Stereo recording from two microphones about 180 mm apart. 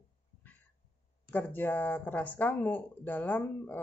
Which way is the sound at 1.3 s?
10° left (ahead or behind).